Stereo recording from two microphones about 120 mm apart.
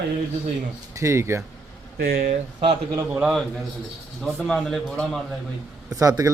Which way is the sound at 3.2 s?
5° right (ahead or behind).